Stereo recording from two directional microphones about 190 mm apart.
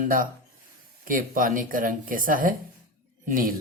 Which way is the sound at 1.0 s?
45° right (ahead or behind).